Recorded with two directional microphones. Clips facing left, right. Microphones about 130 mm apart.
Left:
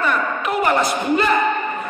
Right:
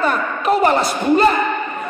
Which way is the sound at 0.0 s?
35° right (ahead or behind).